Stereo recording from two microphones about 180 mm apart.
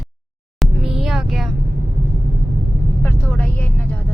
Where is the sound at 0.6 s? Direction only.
Centre (ahead or behind).